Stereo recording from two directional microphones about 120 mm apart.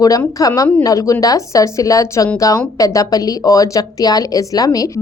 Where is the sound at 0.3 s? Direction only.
30° left (ahead or behind).